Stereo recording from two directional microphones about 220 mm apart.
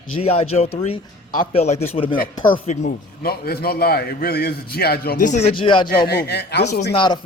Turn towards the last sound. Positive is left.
turn(degrees=20)  # may be behind; listen again after turning